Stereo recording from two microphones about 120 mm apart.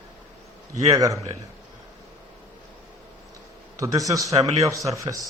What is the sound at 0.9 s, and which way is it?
Speech, 30° right (ahead or behind).